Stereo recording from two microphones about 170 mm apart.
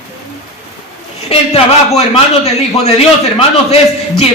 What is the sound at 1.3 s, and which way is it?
A man's voice, 35° left (ahead or behind).